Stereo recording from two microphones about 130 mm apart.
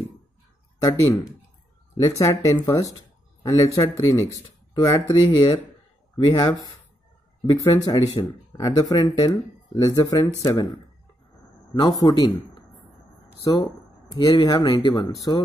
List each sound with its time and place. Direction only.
0.7 s speech: 25° left (ahead or behind)
11.7 s speech: 30° left (ahead or behind)